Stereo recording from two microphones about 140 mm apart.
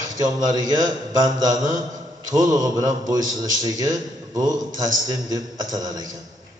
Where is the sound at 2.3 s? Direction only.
25° right (ahead or behind).